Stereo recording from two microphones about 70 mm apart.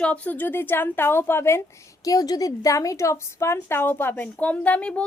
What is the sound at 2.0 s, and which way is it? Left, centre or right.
A woman's voice, left.